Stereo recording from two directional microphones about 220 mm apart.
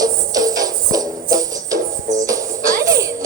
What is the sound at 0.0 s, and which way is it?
Music, 15° right (ahead or behind).